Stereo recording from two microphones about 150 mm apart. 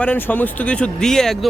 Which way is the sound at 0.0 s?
10° left (ahead or behind).